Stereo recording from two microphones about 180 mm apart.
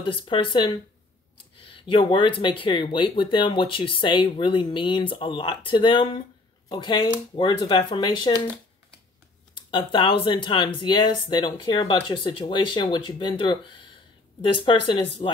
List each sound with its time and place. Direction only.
0.0 s speech: 30° left (ahead or behind)
9.6 s speech: 30° left (ahead or behind)